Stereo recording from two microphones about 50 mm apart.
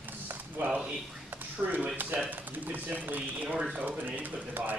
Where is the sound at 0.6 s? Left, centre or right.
Right.